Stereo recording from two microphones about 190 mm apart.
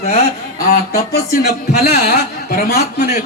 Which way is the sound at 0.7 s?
55° left (ahead or behind).